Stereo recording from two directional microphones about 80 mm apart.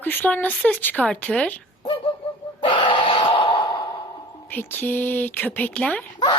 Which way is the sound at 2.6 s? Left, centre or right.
Left.